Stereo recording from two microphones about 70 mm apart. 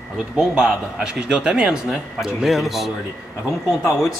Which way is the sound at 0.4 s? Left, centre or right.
Centre.